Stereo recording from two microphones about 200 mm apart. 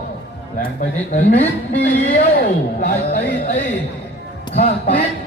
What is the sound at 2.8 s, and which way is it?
Speech, 40° left (ahead or behind).